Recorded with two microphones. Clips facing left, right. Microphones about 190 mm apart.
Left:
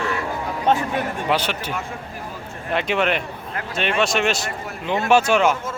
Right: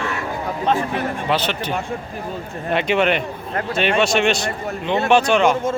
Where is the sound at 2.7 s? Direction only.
Centre (ahead or behind).